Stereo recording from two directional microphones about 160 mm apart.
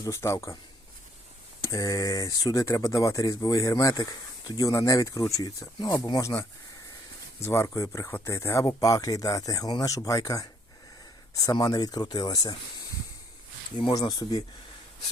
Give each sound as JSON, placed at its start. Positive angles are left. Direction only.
{"t": 0.0, "sound": "speech", "side_deg": 20}
{"t": 1.6, "sound": "speech", "side_deg": 20}
{"t": 7.4, "sound": "speech", "side_deg": 15}
{"t": 13.9, "sound": "speech", "side_deg": 25}